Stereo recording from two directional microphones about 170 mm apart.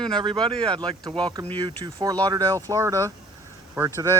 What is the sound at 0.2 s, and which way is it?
Speech, 25° right (ahead or behind).